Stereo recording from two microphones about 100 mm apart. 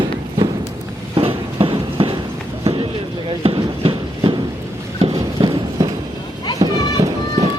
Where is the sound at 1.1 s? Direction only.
70° right (ahead or behind).